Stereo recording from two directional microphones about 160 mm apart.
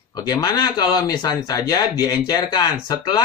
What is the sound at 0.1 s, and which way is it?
Speech, 25° left (ahead or behind).